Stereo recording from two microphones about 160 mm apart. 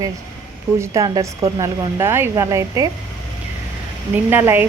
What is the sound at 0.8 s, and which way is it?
Speech, 20° right (ahead or behind).